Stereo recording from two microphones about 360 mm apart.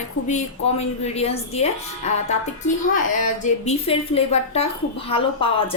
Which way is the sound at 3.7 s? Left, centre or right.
Centre.